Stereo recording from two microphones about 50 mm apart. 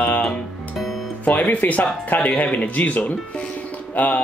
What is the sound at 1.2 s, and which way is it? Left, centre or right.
Speech, left.